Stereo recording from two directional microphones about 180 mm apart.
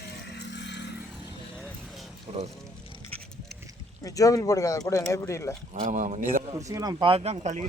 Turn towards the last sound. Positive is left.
turn(degrees=-40)  # may be behind; listen again after turning